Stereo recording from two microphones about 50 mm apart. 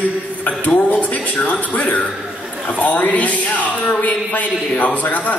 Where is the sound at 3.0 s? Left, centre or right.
Left.